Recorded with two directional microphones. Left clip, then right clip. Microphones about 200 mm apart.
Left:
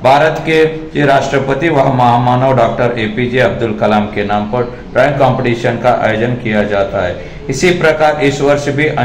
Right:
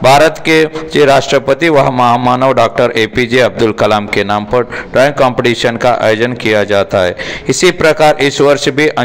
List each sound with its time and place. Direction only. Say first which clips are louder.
0.0 s a man's voice: right 2 dB; 50° right (ahead or behind)